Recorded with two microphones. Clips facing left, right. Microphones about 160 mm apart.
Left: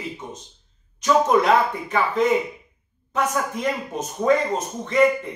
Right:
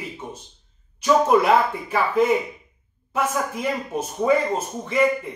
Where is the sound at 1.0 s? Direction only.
10° right (ahead or behind).